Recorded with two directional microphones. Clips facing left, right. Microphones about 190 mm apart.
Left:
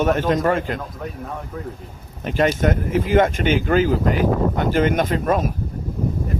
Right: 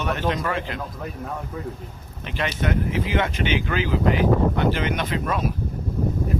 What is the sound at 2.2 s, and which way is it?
Speech, 45° left (ahead or behind).